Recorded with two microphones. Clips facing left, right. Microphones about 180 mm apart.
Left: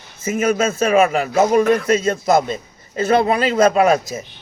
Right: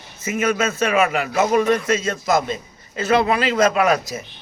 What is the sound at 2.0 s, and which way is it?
A man's voice, 30° left (ahead or behind).